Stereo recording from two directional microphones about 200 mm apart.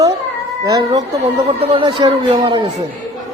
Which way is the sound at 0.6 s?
20° right (ahead or behind).